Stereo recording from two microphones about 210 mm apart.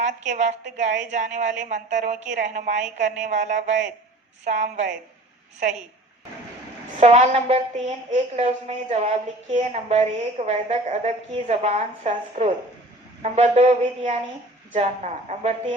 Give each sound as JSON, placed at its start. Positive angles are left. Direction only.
{"t": 0.0, "sound": "a woman's voice", "side_deg": -35}
{"t": 7.0, "sound": "a woman's voice", "side_deg": -30}